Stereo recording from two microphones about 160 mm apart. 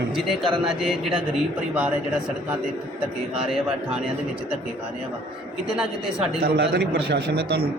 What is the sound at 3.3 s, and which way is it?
Speech, 5° right (ahead or behind).